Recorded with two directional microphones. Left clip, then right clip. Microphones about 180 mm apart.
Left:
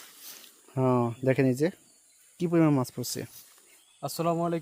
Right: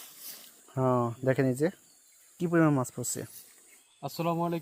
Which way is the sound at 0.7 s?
30° left (ahead or behind).